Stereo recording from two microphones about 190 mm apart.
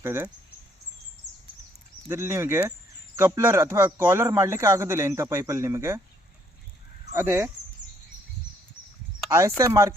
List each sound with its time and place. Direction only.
0.0 s a man's voice: 15° right (ahead or behind)
2.0 s a man's voice: 15° right (ahead or behind)
7.1 s a man's voice: 15° right (ahead or behind)
9.3 s a man's voice: 15° right (ahead or behind)